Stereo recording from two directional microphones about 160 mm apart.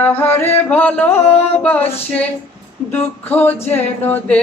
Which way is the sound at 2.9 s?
10° left (ahead or behind).